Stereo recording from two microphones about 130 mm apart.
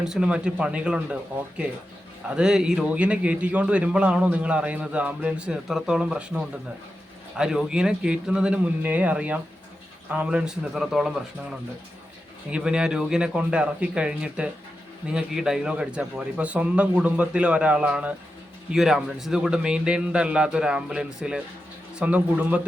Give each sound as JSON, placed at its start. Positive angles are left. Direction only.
{"t": 0.0, "sound": "a man's voice", "side_deg": -5}
{"t": 12.5, "sound": "a man's voice", "side_deg": -5}